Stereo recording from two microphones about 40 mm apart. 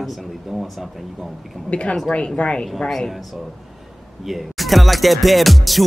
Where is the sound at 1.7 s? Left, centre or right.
Left.